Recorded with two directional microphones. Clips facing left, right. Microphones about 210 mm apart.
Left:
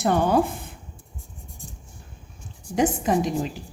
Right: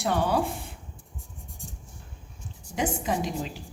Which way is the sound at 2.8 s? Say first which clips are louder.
Left 6 dB; 45° left (ahead or behind).